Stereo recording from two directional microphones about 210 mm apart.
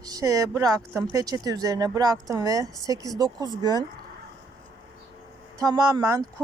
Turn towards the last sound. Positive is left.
turn(degrees=-15)  # may be behind; listen again after turning